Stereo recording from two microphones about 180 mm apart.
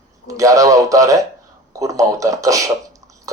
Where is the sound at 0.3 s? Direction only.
20° right (ahead or behind).